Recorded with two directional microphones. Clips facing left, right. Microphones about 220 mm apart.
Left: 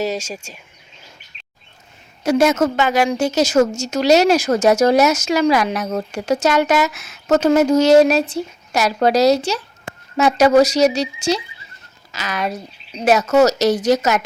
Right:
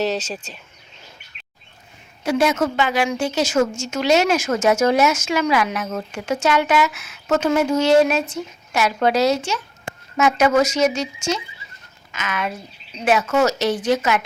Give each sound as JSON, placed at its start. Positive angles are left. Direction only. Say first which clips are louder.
{"t": 0.0, "sound": "speech", "louder": "even", "side_deg": 10}
{"t": 2.2, "sound": "a woman's voice", "louder": "left 4 dB", "side_deg": 45}